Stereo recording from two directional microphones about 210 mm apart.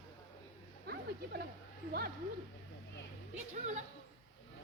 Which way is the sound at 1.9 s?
45° right (ahead or behind).